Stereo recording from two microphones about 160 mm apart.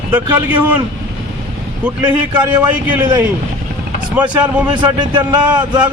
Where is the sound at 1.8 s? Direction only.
10° right (ahead or behind).